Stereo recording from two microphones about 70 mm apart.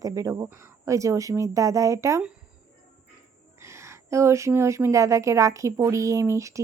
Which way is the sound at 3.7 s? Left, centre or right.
Right.